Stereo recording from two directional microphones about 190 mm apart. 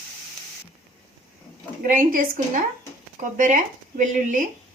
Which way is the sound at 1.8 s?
45° right (ahead or behind).